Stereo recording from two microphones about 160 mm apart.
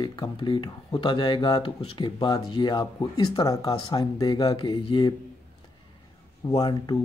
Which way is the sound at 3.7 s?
35° left (ahead or behind).